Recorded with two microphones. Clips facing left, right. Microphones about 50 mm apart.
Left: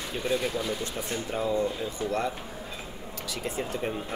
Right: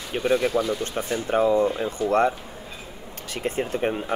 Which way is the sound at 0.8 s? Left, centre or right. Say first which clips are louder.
Right 6 dB; right.